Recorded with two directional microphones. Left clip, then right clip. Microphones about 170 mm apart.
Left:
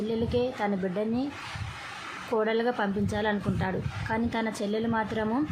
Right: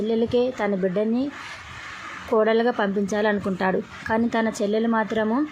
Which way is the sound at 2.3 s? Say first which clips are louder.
Right 7 dB; 25° right (ahead or behind).